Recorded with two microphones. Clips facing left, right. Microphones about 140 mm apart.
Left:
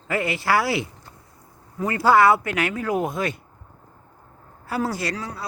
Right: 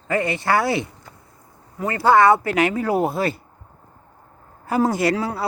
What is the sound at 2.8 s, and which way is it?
Speech, 35° right (ahead or behind).